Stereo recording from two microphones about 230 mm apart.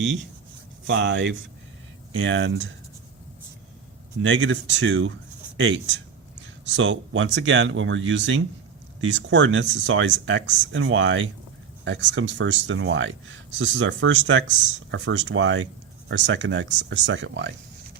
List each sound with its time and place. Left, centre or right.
0.9 s speech: right
4.2 s speech: right